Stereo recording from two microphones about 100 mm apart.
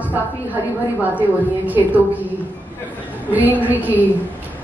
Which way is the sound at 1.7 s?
15° right (ahead or behind).